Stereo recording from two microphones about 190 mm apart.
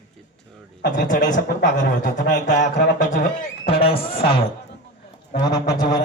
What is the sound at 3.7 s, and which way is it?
Speech, 30° left (ahead or behind).